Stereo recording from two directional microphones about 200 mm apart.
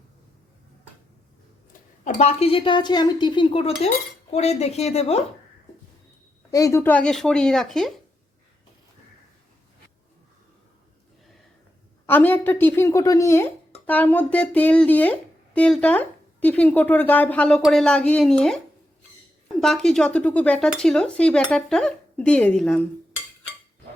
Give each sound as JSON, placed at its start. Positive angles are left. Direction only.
{"t": 2.0, "sound": "a woman's voice", "side_deg": 35}
{"t": 6.5, "sound": "dishes", "side_deg": 15}
{"t": 12.0, "sound": "speech", "side_deg": 10}
{"t": 19.6, "sound": "dishes", "side_deg": 0}